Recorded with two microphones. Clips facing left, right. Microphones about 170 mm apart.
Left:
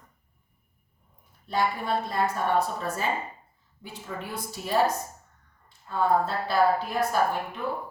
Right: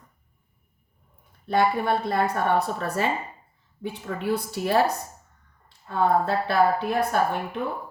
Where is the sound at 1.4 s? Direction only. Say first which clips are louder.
Right 5 dB; 60° right (ahead or behind).